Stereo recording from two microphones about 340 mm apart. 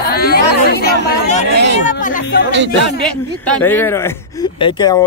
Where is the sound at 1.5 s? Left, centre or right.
Right.